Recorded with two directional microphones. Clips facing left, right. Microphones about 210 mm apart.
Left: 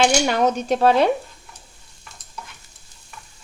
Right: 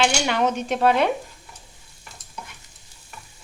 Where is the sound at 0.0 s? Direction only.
40° left (ahead or behind).